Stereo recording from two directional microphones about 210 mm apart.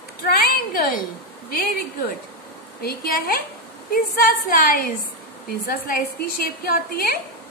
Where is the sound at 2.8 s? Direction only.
45° left (ahead or behind).